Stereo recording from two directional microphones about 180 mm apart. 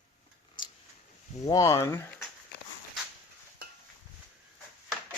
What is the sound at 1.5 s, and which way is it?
Speech, 15° left (ahead or behind).